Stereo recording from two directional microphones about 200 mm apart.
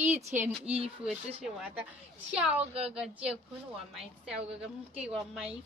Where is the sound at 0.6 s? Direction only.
30° right (ahead or behind).